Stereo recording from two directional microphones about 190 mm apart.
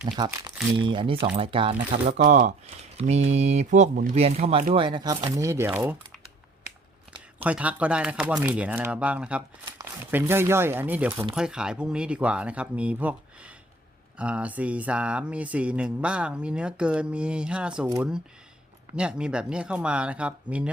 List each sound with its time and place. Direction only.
0.3 s speech: 15° right (ahead or behind)
1.9 s speech: 40° right (ahead or behind)
5.4 s speech: 15° right (ahead or behind)
7.4 s speech: 5° right (ahead or behind)
18.9 s speech: 5° right (ahead or behind)